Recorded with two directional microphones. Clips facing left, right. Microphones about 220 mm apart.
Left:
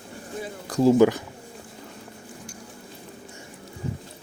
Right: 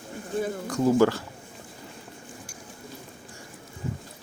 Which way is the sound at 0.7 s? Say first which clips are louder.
Left 6 dB; 35° left (ahead or behind).